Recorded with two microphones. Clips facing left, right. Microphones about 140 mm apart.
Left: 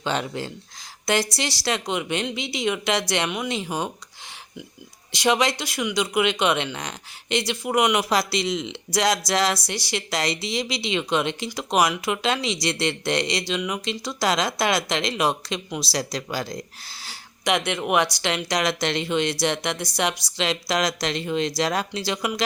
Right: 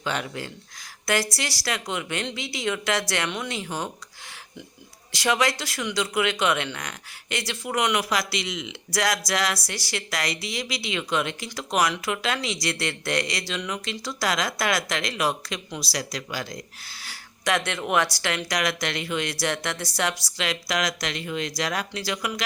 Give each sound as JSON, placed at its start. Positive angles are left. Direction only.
{"t": 0.0, "sound": "speech", "side_deg": 30}
{"t": 5.1, "sound": "speech", "side_deg": 20}
{"t": 8.1, "sound": "speech", "side_deg": 30}
{"t": 17.4, "sound": "speech", "side_deg": 15}